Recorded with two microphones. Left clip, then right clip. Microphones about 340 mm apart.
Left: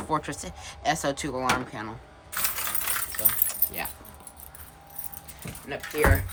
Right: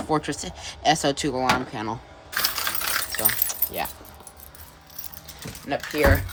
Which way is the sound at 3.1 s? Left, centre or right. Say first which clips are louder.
Right 7 dB; right.